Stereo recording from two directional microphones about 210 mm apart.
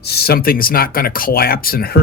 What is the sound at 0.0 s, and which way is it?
Speech, 50° left (ahead or behind).